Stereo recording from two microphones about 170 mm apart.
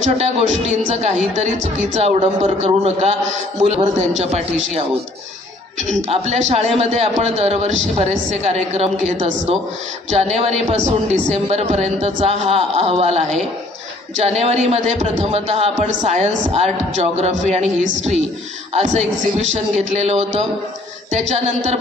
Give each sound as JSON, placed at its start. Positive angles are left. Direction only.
{"t": 0.0, "sound": "speech", "side_deg": -40}
{"t": 5.8, "sound": "speech", "side_deg": -40}
{"t": 14.4, "sound": "speech", "side_deg": -40}